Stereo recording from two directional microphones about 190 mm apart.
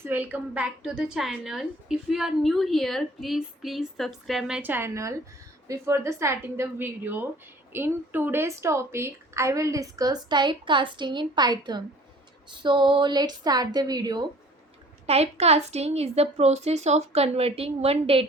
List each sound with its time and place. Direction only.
0.0 s a woman's voice: 10° right (ahead or behind)
15.0 s a woman's voice: 35° right (ahead or behind)